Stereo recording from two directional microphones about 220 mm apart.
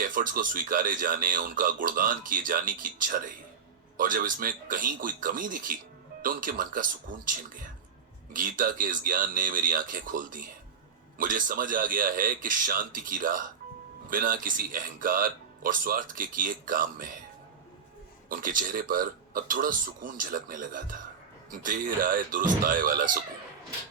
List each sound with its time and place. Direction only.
0.0 s speech: 40° right (ahead or behind)
8.3 s speech: 40° right (ahead or behind)
18.3 s speech: 40° right (ahead or behind)